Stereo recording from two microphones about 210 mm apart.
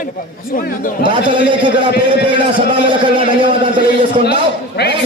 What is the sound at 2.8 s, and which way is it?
Speech, 25° right (ahead or behind).